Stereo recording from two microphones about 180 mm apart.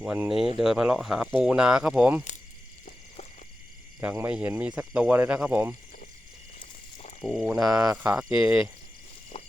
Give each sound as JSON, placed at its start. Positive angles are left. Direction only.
{"t": 0.0, "sound": "speech", "side_deg": -5}
{"t": 4.0, "sound": "speech", "side_deg": -10}
{"t": 7.2, "sound": "speech", "side_deg": 0}
{"t": 7.7, "sound": "speech", "side_deg": -20}
{"t": 8.1, "sound": "speech", "side_deg": -5}
{"t": 9.3, "sound": "walk", "side_deg": 35}